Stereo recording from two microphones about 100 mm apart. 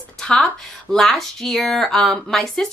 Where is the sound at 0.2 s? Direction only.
5° left (ahead or behind).